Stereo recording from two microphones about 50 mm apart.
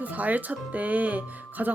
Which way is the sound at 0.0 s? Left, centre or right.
Right.